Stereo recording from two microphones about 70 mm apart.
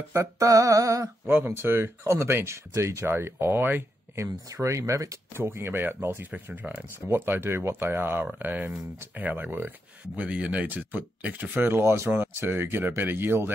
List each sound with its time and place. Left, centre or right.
0.1 s a sound: right
1.2 s speech: right
4.2 s a sound: right
5.3 s speech: right
7.1 s speech: right
10.1 s speech: centre; by 13.5 s right